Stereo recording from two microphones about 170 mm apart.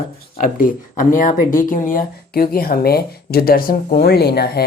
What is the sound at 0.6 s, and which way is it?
A woman's voice, 50° left (ahead or behind).